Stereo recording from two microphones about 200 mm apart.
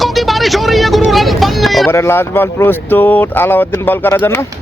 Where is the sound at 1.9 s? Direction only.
10° left (ahead or behind).